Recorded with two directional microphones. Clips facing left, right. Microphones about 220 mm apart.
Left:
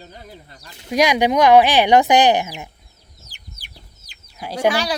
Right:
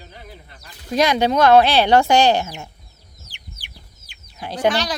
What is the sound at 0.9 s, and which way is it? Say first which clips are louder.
Speech: left 1 dB; 15° left (ahead or behind).